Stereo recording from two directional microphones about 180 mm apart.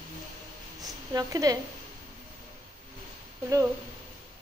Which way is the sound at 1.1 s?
20° right (ahead or behind).